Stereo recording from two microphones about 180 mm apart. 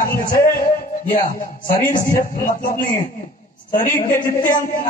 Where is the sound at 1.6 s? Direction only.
45° left (ahead or behind).